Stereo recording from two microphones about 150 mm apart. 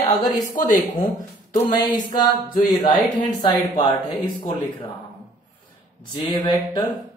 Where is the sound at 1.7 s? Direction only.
25° left (ahead or behind).